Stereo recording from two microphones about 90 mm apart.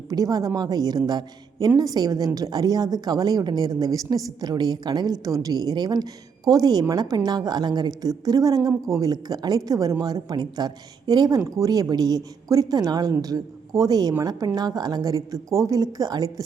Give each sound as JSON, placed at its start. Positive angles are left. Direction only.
{"t": 0.1, "sound": "a woman's voice", "side_deg": -40}